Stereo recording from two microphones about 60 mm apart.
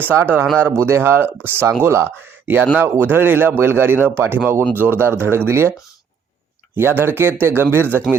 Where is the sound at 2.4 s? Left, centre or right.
Right.